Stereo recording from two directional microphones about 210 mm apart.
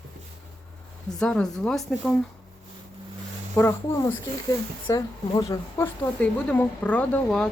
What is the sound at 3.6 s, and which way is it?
Speech, 15° left (ahead or behind).